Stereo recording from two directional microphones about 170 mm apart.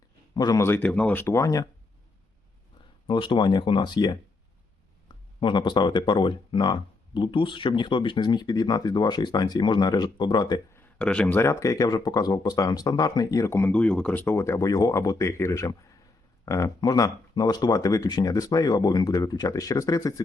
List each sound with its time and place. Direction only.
0.3 s speech: 20° left (ahead or behind)
3.1 s speech: 30° left (ahead or behind)
10.9 s speech: 5° left (ahead or behind)